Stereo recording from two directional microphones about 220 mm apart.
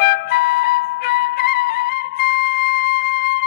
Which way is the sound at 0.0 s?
45° left (ahead or behind).